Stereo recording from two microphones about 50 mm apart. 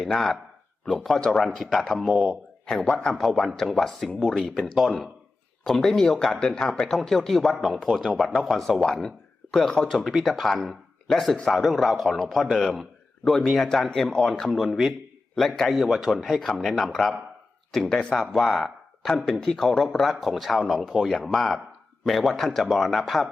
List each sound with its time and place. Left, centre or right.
0.0 s speech: centre
2.1 s speech: centre
2.6 s a man's voice: centre
9.9 s speech: centre
10.7 s a sound: centre
11.4 s speech: centre
15.7 s speech: centre
18.2 s speech: centre